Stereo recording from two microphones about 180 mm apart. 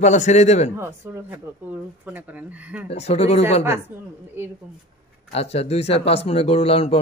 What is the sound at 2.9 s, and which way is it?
Speech, 35° left (ahead or behind).